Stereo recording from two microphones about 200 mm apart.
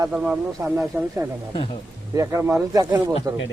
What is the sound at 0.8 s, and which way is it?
Speech, 15° right (ahead or behind).